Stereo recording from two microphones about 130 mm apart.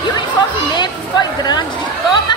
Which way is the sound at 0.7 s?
35° left (ahead or behind).